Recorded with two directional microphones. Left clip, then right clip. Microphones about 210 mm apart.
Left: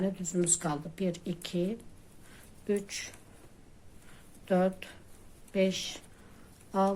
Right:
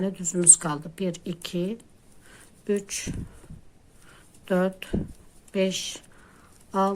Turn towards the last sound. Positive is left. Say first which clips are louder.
# right 4 dB
turn(degrees=-25)  # may be behind; listen again after turning